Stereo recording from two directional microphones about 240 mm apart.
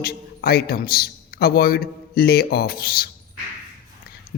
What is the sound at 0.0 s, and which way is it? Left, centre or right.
A man's voice, left.